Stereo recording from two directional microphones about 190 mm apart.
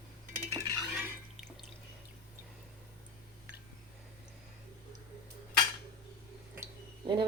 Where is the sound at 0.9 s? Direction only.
5° right (ahead or behind).